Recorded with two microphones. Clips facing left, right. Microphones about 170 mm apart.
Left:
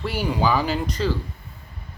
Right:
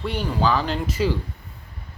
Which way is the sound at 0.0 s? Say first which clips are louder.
Even; 5° left (ahead or behind).